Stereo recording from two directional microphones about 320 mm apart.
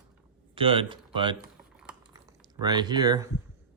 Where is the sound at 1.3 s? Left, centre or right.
Centre.